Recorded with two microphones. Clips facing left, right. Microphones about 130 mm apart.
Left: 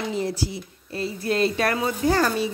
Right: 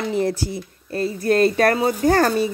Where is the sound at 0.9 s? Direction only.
45° right (ahead or behind).